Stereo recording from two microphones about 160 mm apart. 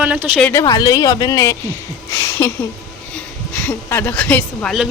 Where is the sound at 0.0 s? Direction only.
5° right (ahead or behind).